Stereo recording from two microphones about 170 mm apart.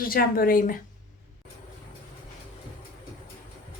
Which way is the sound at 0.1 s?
60° left (ahead or behind).